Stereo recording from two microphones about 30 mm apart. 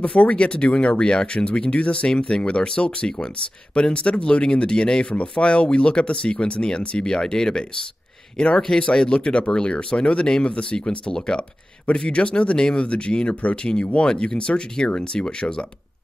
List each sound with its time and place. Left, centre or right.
0.0 s speech: left
12.5 s speech: left
12.8 s speech: left